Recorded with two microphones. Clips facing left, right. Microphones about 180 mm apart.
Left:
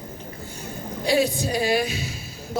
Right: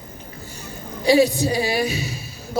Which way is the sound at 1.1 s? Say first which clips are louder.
Right 4 dB; 55° left (ahead or behind).